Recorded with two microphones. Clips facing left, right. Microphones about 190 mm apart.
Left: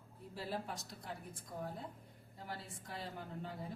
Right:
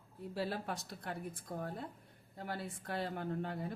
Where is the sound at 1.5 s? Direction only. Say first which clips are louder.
Right 2 dB; 60° right (ahead or behind).